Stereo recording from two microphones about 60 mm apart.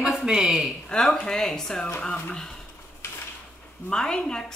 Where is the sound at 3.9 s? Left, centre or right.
Centre.